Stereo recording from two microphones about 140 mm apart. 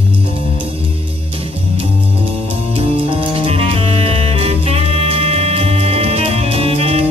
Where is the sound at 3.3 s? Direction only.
45° right (ahead or behind).